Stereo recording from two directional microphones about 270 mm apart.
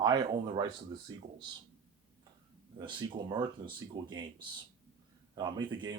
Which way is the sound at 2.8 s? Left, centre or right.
Centre.